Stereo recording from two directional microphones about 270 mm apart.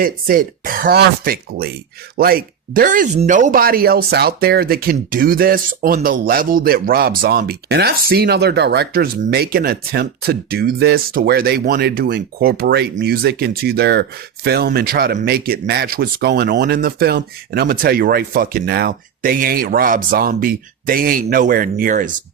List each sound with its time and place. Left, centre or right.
0.0 s speech: right